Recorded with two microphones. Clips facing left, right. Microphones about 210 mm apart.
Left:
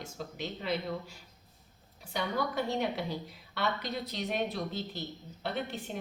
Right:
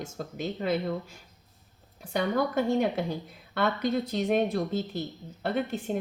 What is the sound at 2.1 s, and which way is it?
Speech, 50° right (ahead or behind).